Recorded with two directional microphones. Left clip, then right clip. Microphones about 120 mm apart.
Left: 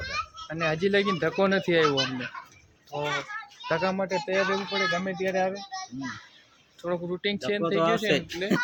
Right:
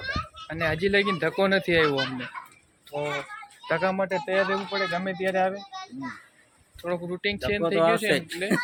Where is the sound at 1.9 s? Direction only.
20° right (ahead or behind).